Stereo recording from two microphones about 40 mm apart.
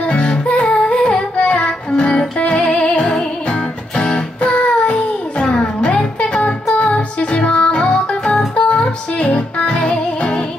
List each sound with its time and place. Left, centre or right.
0.1 s music: left
1.3 s music: left
6.4 s music: left